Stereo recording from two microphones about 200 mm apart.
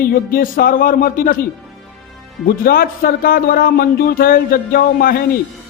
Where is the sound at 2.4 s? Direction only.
45° left (ahead or behind).